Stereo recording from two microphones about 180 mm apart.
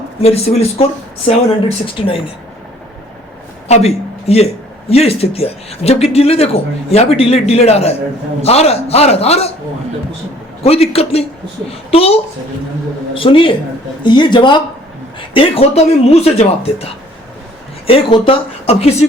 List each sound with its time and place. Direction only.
0.2 s speech: 35° left (ahead or behind)
3.7 s a man's voice: 35° left (ahead or behind)
10.6 s speech: 35° left (ahead or behind)